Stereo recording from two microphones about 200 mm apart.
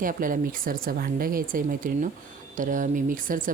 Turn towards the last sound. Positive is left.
turn(degrees=-40)  # may be behind; listen again after turning